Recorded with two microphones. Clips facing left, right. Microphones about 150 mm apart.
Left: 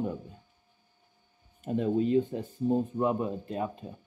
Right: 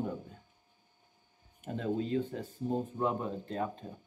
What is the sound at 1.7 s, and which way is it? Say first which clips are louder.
Speech: left 7 dB; 20° left (ahead or behind).